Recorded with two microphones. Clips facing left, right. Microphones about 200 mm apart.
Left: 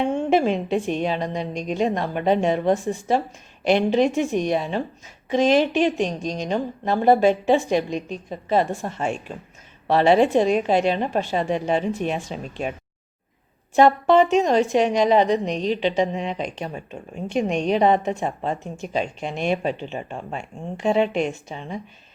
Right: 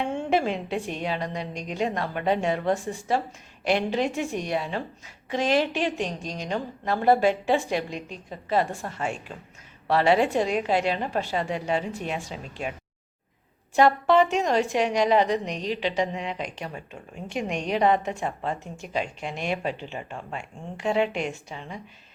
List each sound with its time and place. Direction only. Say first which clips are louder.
0.3 s a woman's voice: left 4 dB; 20° left (ahead or behind)
13.7 s a woman's voice: left 4 dB; 20° left (ahead or behind)